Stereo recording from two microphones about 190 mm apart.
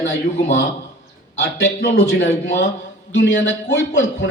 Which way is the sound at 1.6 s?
70° left (ahead or behind).